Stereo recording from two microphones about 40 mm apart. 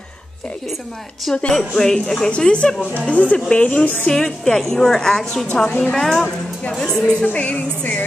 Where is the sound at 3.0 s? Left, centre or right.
Left.